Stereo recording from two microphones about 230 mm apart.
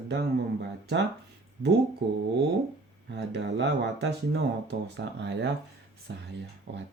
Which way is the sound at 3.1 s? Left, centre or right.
Right.